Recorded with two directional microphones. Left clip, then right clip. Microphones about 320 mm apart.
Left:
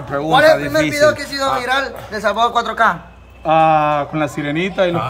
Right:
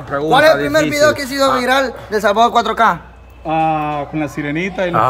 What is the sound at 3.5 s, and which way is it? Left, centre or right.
Speech, centre.